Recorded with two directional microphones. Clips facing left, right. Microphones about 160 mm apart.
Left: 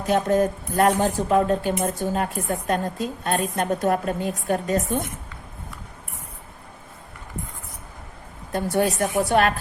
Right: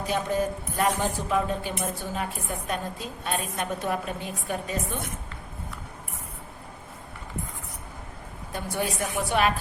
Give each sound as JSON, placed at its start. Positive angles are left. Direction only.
{"t": 0.1, "sound": "speech", "side_deg": 45}
{"t": 8.5, "sound": "speech", "side_deg": 45}